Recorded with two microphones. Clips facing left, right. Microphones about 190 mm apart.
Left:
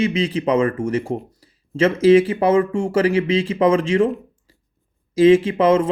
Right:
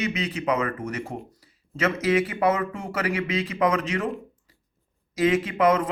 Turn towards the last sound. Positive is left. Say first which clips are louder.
# left 5 dB
turn(degrees=25)  # may be behind; listen again after turning